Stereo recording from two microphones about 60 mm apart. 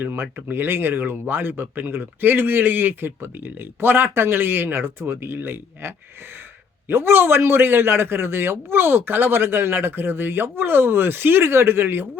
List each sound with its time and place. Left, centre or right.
0.0 s speech: right